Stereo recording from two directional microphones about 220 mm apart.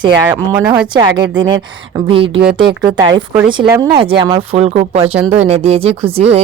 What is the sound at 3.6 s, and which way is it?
A woman's voice, 15° right (ahead or behind).